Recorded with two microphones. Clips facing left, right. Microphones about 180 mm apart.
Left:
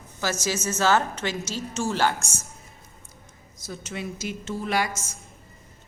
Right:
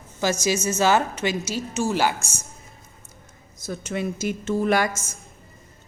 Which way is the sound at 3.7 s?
50° right (ahead or behind).